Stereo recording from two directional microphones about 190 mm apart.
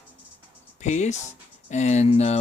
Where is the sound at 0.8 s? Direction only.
40° left (ahead or behind).